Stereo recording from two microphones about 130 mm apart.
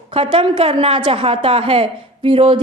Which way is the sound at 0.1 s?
45° right (ahead or behind).